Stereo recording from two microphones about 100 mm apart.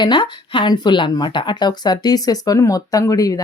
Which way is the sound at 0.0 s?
50° left (ahead or behind).